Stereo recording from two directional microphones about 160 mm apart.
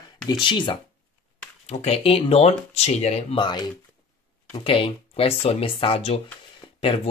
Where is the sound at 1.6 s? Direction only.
40° left (ahead or behind).